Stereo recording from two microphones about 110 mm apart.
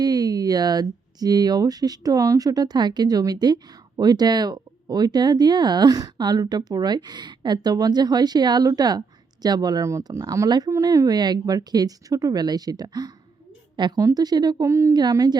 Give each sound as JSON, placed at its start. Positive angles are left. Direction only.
{"t": 0.0, "sound": "a woman's voice", "side_deg": -35}
{"t": 14.7, "sound": "a woman's voice", "side_deg": -25}
{"t": 14.9, "sound": "speech", "side_deg": -35}